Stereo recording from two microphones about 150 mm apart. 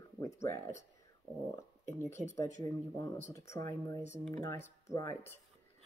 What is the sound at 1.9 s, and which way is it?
Speech, 15° left (ahead or behind).